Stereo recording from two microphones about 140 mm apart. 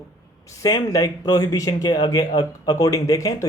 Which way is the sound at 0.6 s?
25° left (ahead or behind).